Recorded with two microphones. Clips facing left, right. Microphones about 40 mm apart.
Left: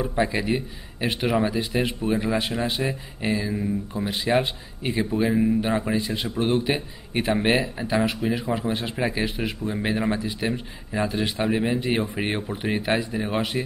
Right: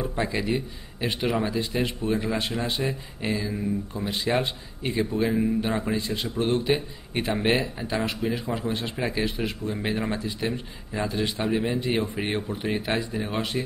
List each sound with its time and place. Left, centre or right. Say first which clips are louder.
0.0 s speech: left 3 dB; centre